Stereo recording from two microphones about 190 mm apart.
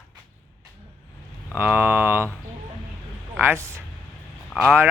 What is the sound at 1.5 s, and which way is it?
Speech, 10° right (ahead or behind).